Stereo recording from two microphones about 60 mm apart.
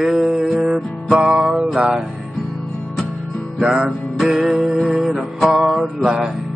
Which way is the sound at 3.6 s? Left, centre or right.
Centre.